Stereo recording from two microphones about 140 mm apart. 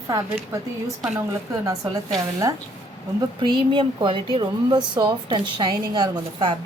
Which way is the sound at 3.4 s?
35° right (ahead or behind).